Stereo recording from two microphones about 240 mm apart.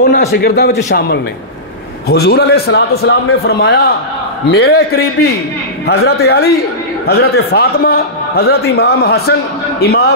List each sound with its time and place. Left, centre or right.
0.0 s a man's voice: left